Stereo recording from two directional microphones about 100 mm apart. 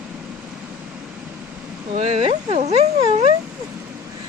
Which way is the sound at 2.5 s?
90° right.